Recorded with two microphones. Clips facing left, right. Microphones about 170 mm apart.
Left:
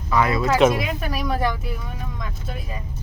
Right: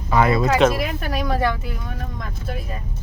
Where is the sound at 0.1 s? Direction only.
30° right (ahead or behind).